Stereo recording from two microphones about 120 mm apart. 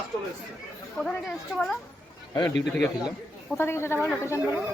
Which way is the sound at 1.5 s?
5° left (ahead or behind).